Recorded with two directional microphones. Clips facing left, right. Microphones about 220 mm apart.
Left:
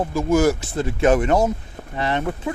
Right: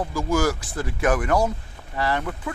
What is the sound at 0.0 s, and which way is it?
Speech, 25° left (ahead or behind).